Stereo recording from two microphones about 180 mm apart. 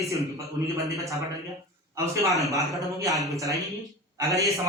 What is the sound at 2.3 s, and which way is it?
Speech, centre (ahead or behind).